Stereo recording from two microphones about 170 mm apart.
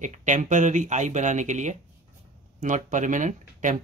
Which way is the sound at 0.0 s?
45° right (ahead or behind).